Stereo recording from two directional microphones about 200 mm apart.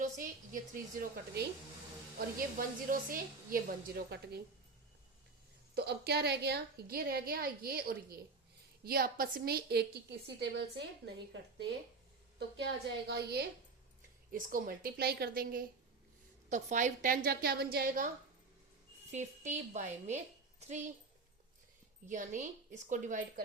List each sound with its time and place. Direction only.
0.0 s a woman's voice: 40° right (ahead or behind)
5.7 s a woman's voice: 55° right (ahead or behind)
12.4 s a woman's voice: 55° right (ahead or behind)
19.1 s speech: 35° right (ahead or behind)
22.0 s speech: 40° right (ahead or behind)